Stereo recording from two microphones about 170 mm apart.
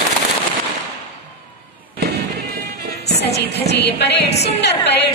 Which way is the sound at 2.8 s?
70° right (ahead or behind).